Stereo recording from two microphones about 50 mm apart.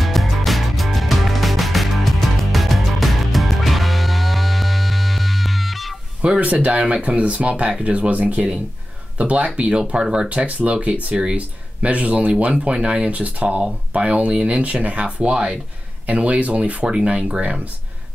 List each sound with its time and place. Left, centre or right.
0.0 s music: centre
6.2 s speech: right